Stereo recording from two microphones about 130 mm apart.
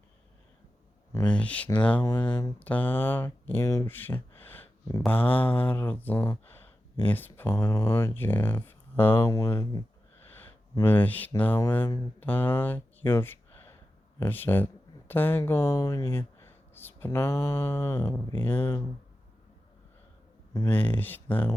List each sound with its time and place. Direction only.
1.2 s mantra: 10° left (ahead or behind)
2.6 s speech: 10° left (ahead or behind)
5.0 s mantra: 15° left (ahead or behind)
7.7 s speech: 25° left (ahead or behind)
11.3 s mantra: 15° left (ahead or behind)
12.2 s speech: 15° left (ahead or behind)
18.3 s mantra: 15° left (ahead or behind)
20.7 s mantra: 15° left (ahead or behind)